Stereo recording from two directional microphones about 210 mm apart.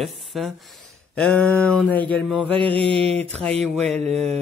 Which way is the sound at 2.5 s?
25° right (ahead or behind).